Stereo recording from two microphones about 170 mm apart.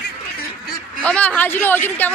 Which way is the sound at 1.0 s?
5° left (ahead or behind).